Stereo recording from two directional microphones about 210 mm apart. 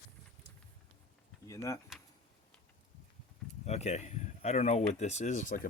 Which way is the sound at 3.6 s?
30° left (ahead or behind).